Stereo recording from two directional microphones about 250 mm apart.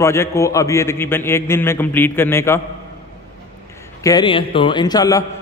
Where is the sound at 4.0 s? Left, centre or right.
Centre.